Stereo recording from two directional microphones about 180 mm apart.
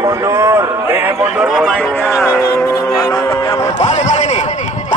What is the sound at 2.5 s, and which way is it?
Speech, 20° left (ahead or behind).